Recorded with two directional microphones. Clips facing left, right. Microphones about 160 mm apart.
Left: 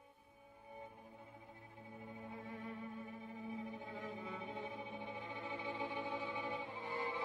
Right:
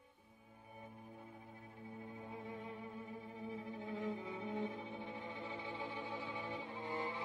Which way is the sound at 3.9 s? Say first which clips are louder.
Right 4 dB; 20° right (ahead or behind).